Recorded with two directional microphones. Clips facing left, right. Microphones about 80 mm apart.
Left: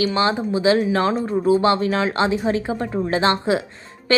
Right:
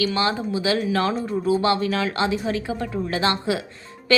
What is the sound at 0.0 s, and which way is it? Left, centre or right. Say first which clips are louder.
Speech: left 3 dB; left.